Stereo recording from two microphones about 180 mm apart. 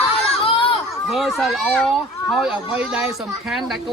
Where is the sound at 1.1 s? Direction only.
Centre (ahead or behind).